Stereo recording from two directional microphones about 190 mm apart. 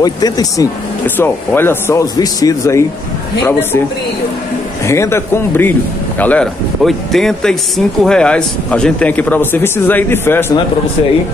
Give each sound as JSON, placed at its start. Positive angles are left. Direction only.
{"t": 0.0, "sound": "a man's voice", "side_deg": 20}
{"t": 4.8, "sound": "a man's voice", "side_deg": 15}